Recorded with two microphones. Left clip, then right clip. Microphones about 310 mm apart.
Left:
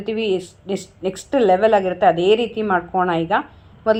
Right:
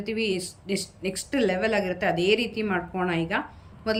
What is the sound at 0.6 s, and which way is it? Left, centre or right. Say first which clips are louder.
Speech: left 6 dB; right.